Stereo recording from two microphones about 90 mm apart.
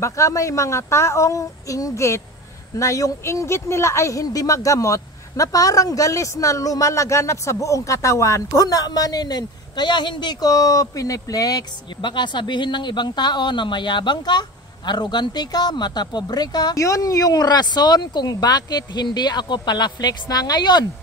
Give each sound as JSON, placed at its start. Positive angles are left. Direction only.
{"t": 0.0, "sound": "speech", "side_deg": 35}
{"t": 10.5, "sound": "speech", "side_deg": 40}